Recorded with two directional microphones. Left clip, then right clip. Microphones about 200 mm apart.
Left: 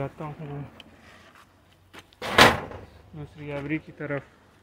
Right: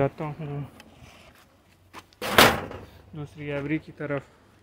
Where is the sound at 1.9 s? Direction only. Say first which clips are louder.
Even; 45° right (ahead or behind).